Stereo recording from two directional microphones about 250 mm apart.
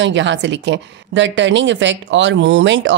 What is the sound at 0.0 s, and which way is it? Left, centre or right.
Speech, right.